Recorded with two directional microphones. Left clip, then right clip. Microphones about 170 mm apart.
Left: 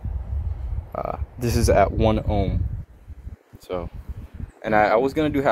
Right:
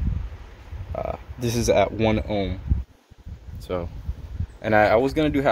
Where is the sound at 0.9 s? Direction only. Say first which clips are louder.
Left 1 dB; 10° left (ahead or behind).